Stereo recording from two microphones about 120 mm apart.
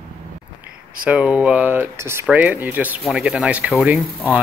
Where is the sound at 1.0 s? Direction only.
10° right (ahead or behind).